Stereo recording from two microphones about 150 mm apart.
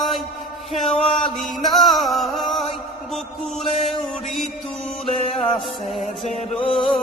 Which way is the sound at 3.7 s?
45° left (ahead or behind).